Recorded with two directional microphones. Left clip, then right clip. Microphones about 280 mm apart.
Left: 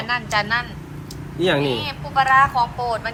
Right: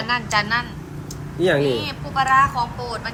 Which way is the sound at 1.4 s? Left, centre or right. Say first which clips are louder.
Right 1 dB; centre.